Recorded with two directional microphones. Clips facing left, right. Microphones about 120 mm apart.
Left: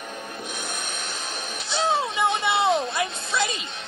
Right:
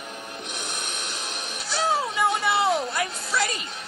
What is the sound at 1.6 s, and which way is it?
Music, 25° left (ahead or behind).